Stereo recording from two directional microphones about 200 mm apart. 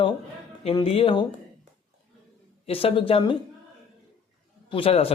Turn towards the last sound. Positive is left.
turn(degrees=30)  # may be behind; listen again after turning